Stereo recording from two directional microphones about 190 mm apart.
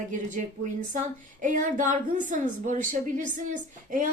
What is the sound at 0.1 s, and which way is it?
A woman's voice, 40° right (ahead or behind).